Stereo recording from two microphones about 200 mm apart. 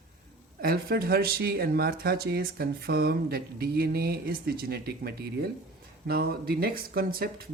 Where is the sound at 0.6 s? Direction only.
50° right (ahead or behind).